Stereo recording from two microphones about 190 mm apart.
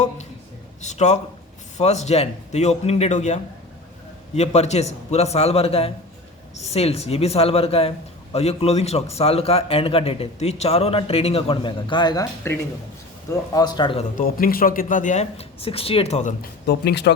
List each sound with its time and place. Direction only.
0.8 s a man's voice: 40° left (ahead or behind)
14.2 s a man's voice: 50° left (ahead or behind)
16.4 s speech: 60° left (ahead or behind)